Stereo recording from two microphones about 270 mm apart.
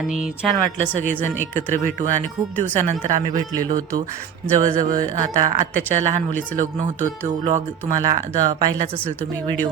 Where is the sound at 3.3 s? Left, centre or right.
Centre.